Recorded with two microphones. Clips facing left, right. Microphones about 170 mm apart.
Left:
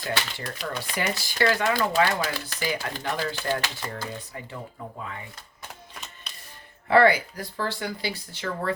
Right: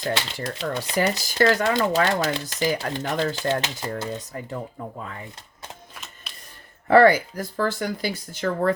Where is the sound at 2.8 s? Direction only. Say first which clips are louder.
Right 5 dB; 40° right (ahead or behind).